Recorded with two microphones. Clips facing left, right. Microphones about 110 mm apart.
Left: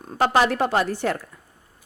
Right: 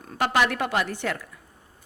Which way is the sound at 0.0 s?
30° left (ahead or behind).